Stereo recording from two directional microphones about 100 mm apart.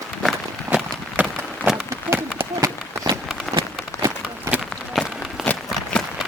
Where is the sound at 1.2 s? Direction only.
15° right (ahead or behind).